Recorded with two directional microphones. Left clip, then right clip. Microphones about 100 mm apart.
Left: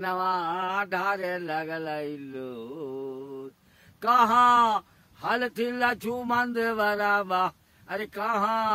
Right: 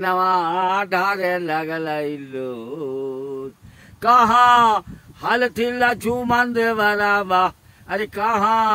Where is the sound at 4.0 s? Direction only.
20° left (ahead or behind).